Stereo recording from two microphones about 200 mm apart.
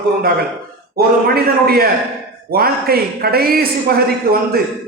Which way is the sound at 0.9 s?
50° right (ahead or behind).